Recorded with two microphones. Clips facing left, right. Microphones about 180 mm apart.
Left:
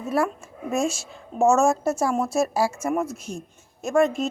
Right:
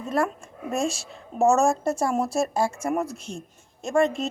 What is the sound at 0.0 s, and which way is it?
A woman's voice, 5° left (ahead or behind).